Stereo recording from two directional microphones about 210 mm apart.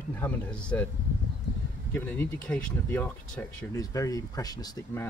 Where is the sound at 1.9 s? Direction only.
5° left (ahead or behind).